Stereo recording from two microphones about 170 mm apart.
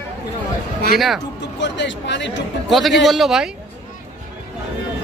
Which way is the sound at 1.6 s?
90° left.